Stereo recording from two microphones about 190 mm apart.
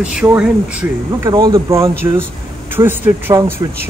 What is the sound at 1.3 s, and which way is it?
Speech, 20° right (ahead or behind).